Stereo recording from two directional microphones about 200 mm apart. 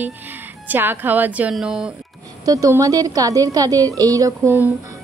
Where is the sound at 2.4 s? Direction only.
15° right (ahead or behind).